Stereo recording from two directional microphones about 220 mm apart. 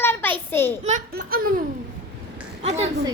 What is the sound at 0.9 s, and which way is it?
Baby laughter, 40° right (ahead or behind).